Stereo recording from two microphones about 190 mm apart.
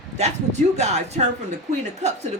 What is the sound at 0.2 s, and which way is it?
Speech, 35° right (ahead or behind).